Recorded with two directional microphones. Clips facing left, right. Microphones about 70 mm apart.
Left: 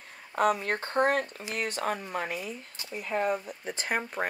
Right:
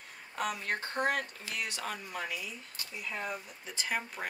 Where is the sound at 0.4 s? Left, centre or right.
Left.